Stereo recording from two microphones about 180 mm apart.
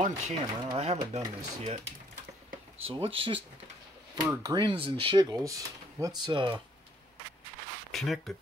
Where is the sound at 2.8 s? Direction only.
30° right (ahead or behind).